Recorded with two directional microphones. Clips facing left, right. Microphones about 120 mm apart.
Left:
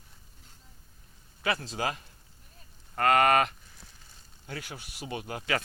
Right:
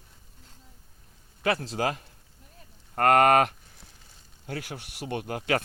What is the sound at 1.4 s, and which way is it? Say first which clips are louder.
Speech: right 4 dB; 50° right (ahead or behind).